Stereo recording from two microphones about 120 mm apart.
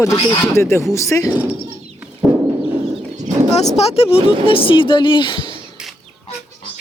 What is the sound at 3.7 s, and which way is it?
Speech, 55° left (ahead or behind).